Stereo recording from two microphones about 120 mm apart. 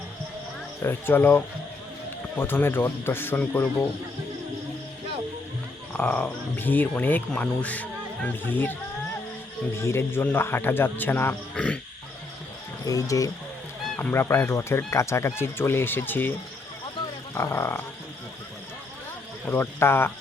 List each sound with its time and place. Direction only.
0.8 s speech: 20° left (ahead or behind)
5.9 s speech: 10° left (ahead or behind)
9.7 s speech: 20° left (ahead or behind)
12.8 s speech: 30° left (ahead or behind)
13.8 s honk: 10° left (ahead or behind)
14.1 s speech: 20° left (ahead or behind)
17.3 s speech: 25° left (ahead or behind)
19.5 s speech: 20° left (ahead or behind)